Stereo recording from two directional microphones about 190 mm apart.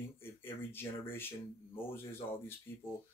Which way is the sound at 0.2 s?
10° left (ahead or behind).